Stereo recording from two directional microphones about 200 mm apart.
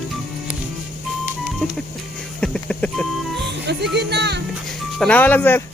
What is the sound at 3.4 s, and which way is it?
Music, 60° right (ahead or behind).